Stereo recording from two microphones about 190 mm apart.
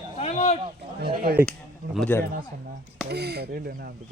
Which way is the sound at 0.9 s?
50° right (ahead or behind).